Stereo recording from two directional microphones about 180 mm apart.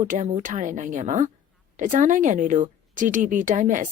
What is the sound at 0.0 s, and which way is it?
A woman's voice, 40° right (ahead or behind).